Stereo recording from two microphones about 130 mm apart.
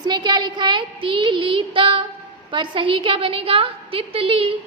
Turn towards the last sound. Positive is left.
turn(degrees=-45)  # may be behind; listen again after turning